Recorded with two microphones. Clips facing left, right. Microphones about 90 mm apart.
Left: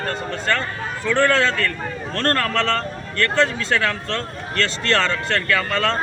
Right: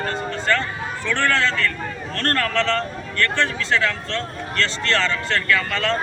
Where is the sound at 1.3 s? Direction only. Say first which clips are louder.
Left 2 dB; 35° left (ahead or behind).